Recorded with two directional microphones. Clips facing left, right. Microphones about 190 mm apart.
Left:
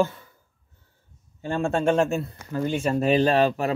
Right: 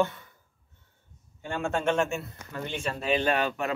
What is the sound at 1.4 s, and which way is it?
Speech, 35° left (ahead or behind).